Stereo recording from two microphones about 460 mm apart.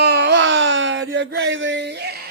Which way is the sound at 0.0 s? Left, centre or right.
Right.